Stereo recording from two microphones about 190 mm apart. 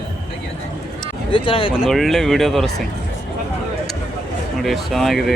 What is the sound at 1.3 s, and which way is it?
Speech, 25° left (ahead or behind).